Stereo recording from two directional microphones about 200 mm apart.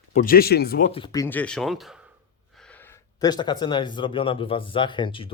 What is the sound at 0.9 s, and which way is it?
Speech, 20° left (ahead or behind).